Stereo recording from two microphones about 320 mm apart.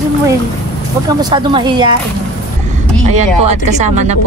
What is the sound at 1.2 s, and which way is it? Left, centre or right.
Speech, centre.